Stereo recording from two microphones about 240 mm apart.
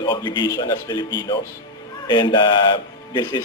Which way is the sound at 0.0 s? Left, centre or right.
Centre.